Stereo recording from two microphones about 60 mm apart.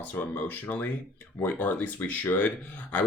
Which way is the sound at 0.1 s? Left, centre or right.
Left.